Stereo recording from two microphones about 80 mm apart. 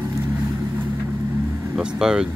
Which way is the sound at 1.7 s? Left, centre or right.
Centre.